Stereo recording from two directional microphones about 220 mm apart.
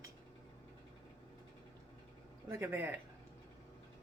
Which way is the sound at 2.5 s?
10° right (ahead or behind).